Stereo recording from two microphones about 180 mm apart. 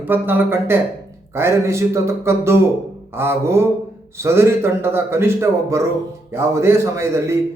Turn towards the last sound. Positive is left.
turn(degrees=-15)  # may be behind; listen again after turning